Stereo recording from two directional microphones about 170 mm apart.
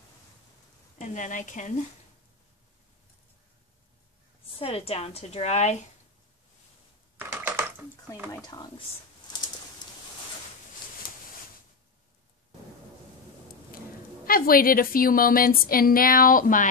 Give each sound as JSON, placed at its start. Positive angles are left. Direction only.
{"t": 0.9, "sound": "speech", "side_deg": 45}
{"t": 4.6, "sound": "a woman's voice", "side_deg": 35}
{"t": 7.2, "sound": "typing", "side_deg": -10}
{"t": 8.5, "sound": "speech", "side_deg": 25}
{"t": 11.0, "sound": "a sound", "side_deg": 25}
{"t": 14.2, "sound": "a woman's voice", "side_deg": 60}